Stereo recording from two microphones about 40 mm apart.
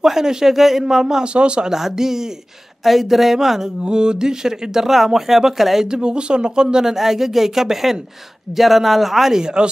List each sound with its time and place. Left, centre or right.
0.0 s speech: centre
1.2 s speech: right
1.7 s speech: centre
2.8 s speech: centre
3.8 s speech: right
5.9 s speech: right
9.4 s speech: right